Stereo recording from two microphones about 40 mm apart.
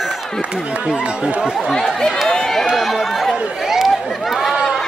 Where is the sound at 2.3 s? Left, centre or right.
Centre.